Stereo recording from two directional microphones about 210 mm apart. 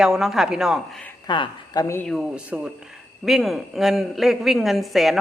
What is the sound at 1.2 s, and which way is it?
Speech, 20° left (ahead or behind).